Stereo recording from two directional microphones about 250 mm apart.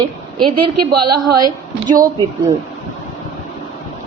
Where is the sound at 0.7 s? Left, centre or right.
Right.